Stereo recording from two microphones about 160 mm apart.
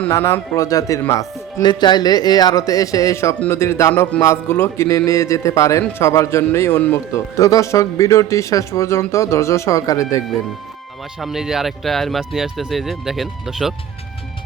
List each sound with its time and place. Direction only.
0.0 s speech: 15° left (ahead or behind)
11.2 s speech: centre (ahead or behind)